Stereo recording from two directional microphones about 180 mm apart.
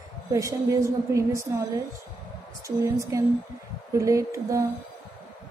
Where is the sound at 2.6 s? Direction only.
15° right (ahead or behind).